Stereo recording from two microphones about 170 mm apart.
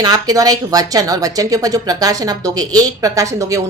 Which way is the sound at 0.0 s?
20° right (ahead or behind).